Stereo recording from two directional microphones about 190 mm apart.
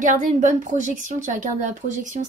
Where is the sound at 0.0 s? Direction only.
40° right (ahead or behind).